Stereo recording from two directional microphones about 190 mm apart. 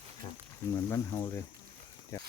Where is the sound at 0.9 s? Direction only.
15° left (ahead or behind).